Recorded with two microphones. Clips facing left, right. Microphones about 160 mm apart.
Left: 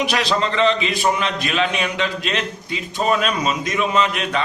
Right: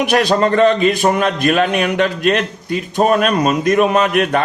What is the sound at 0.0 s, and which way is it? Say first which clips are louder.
A man's voice: right 7 dB; 50° right (ahead or behind).